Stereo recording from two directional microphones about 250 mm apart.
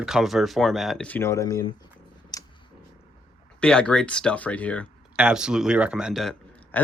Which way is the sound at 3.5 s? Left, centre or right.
Centre.